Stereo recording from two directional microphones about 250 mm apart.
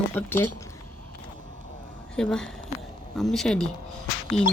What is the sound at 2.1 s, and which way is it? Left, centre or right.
Speech, centre.